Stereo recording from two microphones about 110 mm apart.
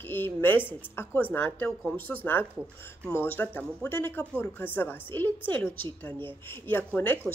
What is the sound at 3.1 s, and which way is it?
A woman's voice, 20° left (ahead or behind).